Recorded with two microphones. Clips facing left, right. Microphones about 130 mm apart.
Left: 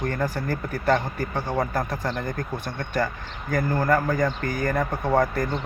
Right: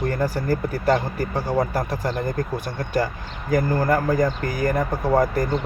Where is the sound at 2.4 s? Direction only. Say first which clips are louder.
Right 4 dB; 35° right (ahead or behind).